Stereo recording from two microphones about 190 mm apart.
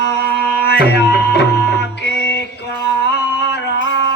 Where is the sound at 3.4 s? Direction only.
70° left (ahead or behind).